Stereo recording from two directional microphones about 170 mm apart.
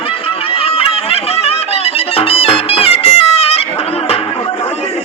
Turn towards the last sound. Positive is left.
turn(degrees=35)  # may be behind; listen again after turning